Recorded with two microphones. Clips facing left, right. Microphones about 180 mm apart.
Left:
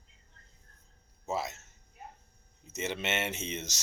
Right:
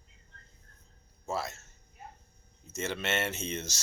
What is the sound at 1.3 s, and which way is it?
Speech, 20° left (ahead or behind).